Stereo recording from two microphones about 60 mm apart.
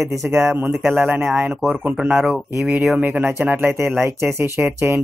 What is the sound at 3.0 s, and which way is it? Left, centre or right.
Speech, right.